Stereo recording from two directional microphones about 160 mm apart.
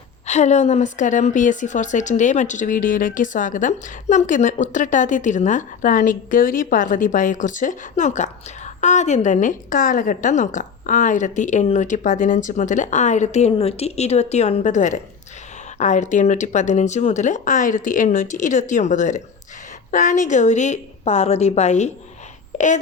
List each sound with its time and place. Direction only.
0.3 s a woman's voice: 45° left (ahead or behind)